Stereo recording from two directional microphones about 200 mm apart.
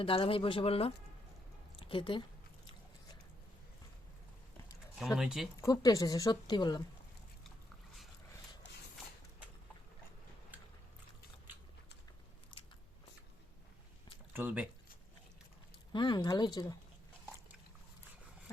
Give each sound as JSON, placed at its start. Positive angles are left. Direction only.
{"t": 0.0, "sound": "a woman's voice", "side_deg": 25}
{"t": 4.9, "sound": "speech", "side_deg": 0}
{"t": 5.5, "sound": "speech", "side_deg": 15}
{"t": 14.3, "sound": "speech", "side_deg": -10}
{"t": 15.9, "sound": "speech", "side_deg": 25}